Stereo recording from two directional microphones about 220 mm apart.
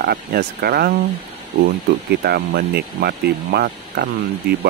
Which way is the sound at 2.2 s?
45° right (ahead or behind).